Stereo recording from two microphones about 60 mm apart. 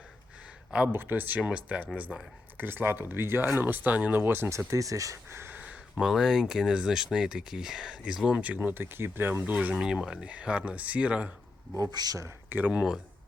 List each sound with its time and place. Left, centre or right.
0.9 s speech: right
1.4 s speech: centre
2.6 s speech: right
4.4 s speech: right
5.5 s a sound: right
6.0 s speech: centre
8.4 s speech: right
9.7 s speech: centre
11.8 s speech: right
12.5 s speech: right